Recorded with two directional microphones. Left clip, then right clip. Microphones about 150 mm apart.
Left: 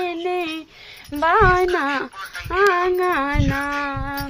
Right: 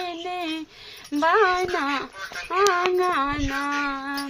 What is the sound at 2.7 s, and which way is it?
Child singing, 35° left (ahead or behind).